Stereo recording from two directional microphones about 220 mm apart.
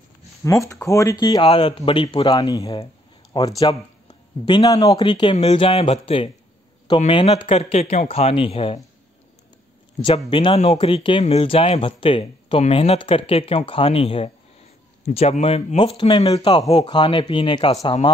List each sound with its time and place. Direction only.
0.4 s speech: 15° left (ahead or behind)
10.0 s speech: 25° left (ahead or behind)